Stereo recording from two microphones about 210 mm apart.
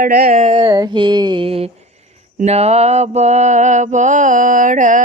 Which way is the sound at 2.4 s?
30° right (ahead or behind).